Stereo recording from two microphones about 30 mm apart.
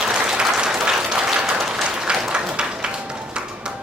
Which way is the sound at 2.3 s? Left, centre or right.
Right.